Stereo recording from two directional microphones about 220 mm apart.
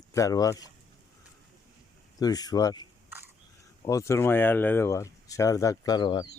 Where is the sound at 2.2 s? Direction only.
15° left (ahead or behind).